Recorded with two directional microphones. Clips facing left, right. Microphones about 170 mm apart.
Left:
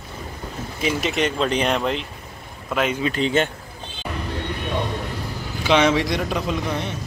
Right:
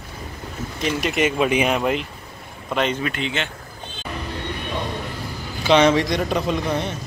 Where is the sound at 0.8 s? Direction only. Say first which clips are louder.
Right 1 dB; centre (ahead or behind).